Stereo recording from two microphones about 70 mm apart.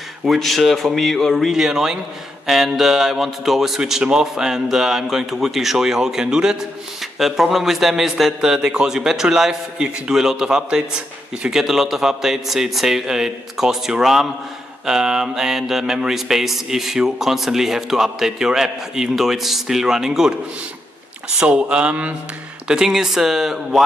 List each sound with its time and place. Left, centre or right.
0.2 s mantra: centre
2.4 s a man's voice: centre
11.4 s mantra: centre
21.4 s a man's voice: centre
22.7 s mantra: centre